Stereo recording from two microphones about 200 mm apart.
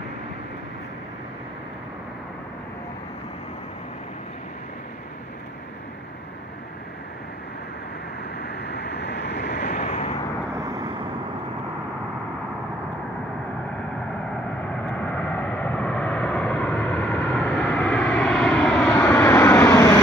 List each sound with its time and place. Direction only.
8.4 s vehicle: 55° left (ahead or behind)
9.6 s vehicle: 35° left (ahead or behind)
15.0 s vehicle: 5° left (ahead or behind)